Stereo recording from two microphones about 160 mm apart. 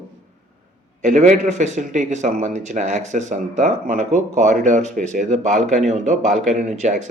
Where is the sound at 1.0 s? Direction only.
50° right (ahead or behind).